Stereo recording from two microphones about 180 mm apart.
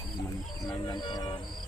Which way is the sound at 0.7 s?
25° left (ahead or behind).